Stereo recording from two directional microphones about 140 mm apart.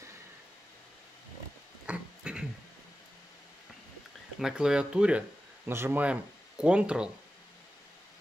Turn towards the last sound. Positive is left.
turn(degrees=-5)  # may be behind; listen again after turning